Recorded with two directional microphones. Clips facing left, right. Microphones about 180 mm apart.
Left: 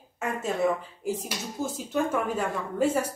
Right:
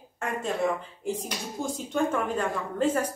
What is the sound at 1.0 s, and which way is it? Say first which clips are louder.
A woman's voice: left 1 dB; 5° left (ahead or behind).